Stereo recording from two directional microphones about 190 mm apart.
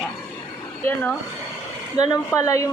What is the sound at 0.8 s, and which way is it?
Speech, 10° left (ahead or behind).